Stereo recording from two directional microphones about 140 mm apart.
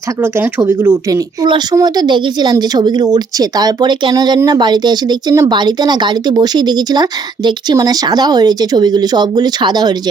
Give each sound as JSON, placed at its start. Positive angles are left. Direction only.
{"t": 0.2, "sound": "speech", "side_deg": -15}
{"t": 1.5, "sound": "speech", "side_deg": -30}